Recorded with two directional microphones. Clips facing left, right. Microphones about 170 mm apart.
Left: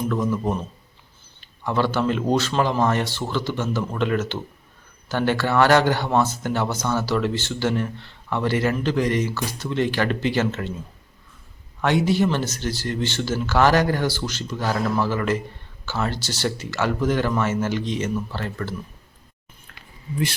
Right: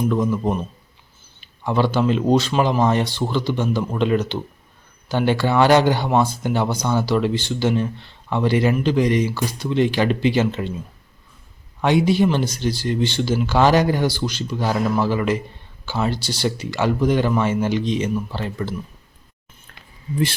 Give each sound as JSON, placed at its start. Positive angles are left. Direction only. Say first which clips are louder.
{"t": 0.1, "sound": "speech", "louder": "right 3 dB", "side_deg": -15}
{"t": 11.8, "sound": "speech", "louder": "right 3 dB", "side_deg": -15}